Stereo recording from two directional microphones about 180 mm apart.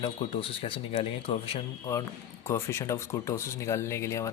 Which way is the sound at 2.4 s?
15° left (ahead or behind).